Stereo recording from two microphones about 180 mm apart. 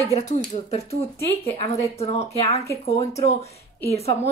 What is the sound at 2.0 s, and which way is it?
Speech, 35° left (ahead or behind).